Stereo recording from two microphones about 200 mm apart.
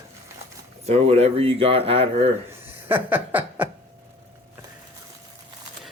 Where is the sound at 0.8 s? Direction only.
30° right (ahead or behind).